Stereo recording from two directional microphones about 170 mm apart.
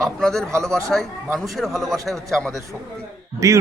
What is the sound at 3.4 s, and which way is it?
Speech, 20° right (ahead or behind).